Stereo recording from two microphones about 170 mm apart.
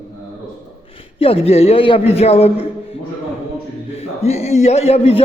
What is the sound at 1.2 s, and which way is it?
A man's voice, 35° left (ahead or behind).